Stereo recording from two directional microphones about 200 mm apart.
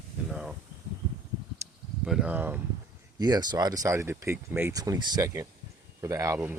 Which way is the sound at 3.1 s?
20° right (ahead or behind).